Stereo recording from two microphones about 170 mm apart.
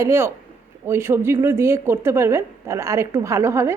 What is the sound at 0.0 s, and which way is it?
A woman's voice, 15° right (ahead or behind).